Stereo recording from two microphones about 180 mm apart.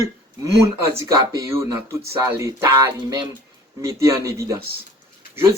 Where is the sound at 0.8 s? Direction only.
15° right (ahead or behind).